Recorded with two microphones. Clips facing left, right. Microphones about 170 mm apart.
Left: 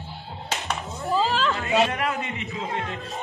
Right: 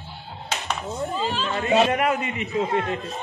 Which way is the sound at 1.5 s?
20° right (ahead or behind).